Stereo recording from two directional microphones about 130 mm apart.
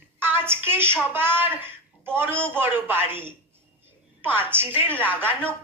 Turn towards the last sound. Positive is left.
turn(degrees=-15)  # may be behind; listen again after turning